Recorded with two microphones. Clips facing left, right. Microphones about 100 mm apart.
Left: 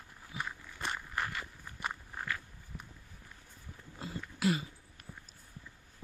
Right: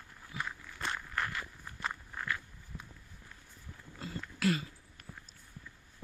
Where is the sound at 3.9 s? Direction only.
15° left (ahead or behind).